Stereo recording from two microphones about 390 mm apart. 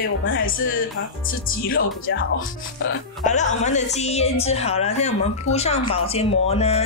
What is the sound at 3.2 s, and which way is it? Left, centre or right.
Speech, centre.